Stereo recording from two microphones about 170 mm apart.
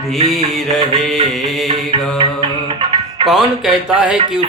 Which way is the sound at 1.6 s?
30° right (ahead or behind).